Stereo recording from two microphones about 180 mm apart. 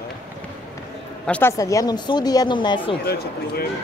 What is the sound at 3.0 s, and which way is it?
Speech, 60° left (ahead or behind).